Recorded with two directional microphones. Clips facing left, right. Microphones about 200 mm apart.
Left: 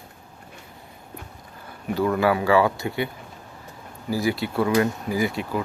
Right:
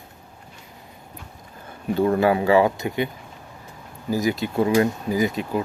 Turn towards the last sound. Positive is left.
turn(degrees=-20)  # may be behind; listen again after turning